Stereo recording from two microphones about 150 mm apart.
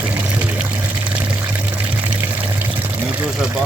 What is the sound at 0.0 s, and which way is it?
Water, 10° right (ahead or behind).